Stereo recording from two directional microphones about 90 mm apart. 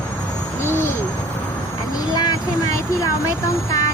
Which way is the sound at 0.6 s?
25° left (ahead or behind).